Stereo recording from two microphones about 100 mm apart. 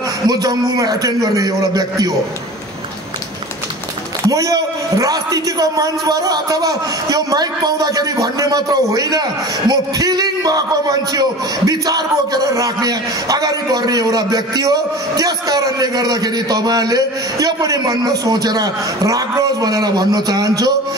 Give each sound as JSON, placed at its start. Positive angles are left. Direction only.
{"t": 0.3, "sound": "a man's voice", "side_deg": -40}
{"t": 4.3, "sound": "a man's voice", "side_deg": -35}